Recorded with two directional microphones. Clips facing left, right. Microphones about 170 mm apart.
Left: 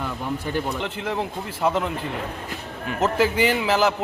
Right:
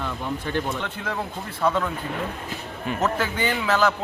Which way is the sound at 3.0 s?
25° left (ahead or behind).